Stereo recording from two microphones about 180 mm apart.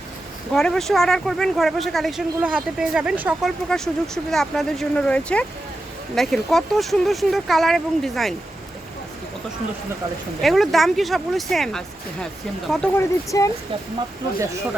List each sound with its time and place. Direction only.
0.5 s speech: 5° left (ahead or behind)
10.4 s speech: centre (ahead or behind)
13.0 s speech: 20° left (ahead or behind)